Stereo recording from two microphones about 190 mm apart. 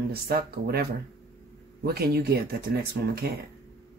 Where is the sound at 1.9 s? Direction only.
55° right (ahead or behind).